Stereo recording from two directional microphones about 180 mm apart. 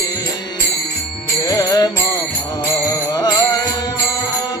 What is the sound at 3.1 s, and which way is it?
Music, 20° left (ahead or behind).